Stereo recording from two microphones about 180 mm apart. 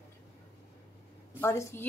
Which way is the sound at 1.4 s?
15° left (ahead or behind).